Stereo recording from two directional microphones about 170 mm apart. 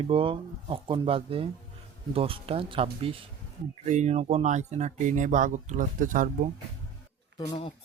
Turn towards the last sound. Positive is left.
turn(degrees=30)  # may be behind; listen again after turning